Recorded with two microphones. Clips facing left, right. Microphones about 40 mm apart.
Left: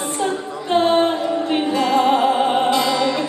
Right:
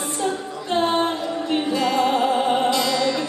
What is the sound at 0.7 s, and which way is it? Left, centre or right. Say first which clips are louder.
Female singing: left 5 dB; centre.